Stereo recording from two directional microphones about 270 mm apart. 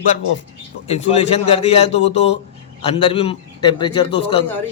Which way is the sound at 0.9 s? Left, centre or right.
Left.